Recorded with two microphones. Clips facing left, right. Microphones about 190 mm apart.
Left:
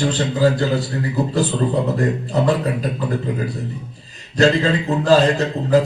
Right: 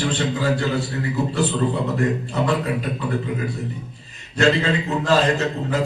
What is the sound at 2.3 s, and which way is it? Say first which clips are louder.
Speech: left 3 dB; 35° left (ahead or behind).